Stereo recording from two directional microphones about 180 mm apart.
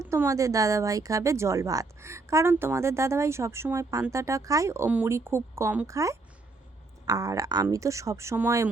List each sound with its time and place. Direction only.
0.0 s speech: 15° right (ahead or behind)